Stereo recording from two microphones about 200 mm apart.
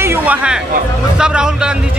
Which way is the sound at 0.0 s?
10° right (ahead or behind).